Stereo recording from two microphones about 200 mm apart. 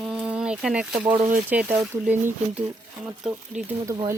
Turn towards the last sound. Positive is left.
turn(degrees=-15)  # may be behind; listen again after turning